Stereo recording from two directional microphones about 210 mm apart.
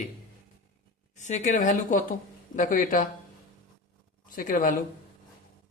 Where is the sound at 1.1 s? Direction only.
35° left (ahead or behind).